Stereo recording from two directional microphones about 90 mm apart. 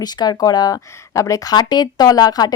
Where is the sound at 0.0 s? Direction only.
50° left (ahead or behind).